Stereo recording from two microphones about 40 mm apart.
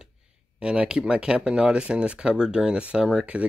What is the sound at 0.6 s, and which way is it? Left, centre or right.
Speech, right.